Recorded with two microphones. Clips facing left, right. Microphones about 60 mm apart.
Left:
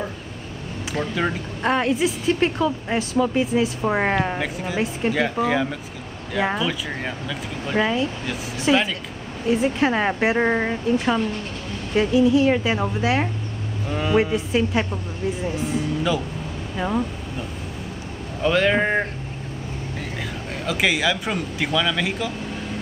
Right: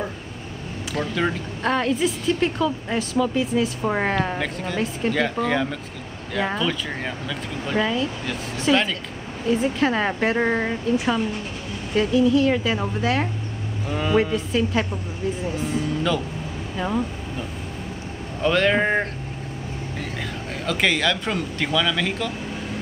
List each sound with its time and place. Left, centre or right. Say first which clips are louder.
0.9 s speech: even; centre
7.8 s speech: left 2 dB; left
8.3 s speech: even; centre
11.9 s speech: left 1 dB; centre
16.7 s vehicle: left 1 dB; centre
18.4 s speech: even; centre
20.2 s speech: even; centre